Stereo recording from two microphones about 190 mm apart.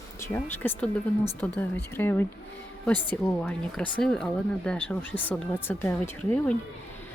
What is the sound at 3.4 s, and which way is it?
Speech, 5° left (ahead or behind).